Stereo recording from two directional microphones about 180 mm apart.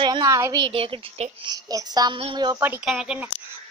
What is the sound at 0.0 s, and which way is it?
A woman's voice, 20° right (ahead or behind).